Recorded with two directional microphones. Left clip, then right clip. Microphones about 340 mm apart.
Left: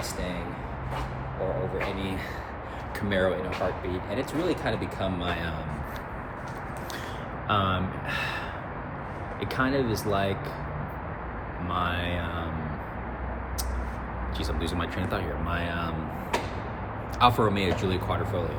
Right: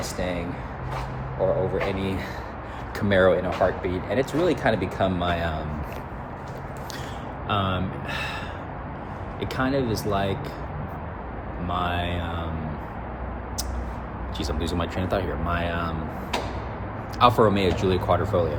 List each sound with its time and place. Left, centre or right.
2.0 s speech: centre
7.4 s speech: centre
9.4 s speech: centre
11.7 s speech: centre
14.3 s speech: centre
17.2 s speech: centre